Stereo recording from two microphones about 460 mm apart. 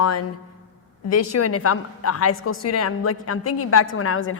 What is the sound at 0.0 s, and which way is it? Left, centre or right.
A man's voice, left.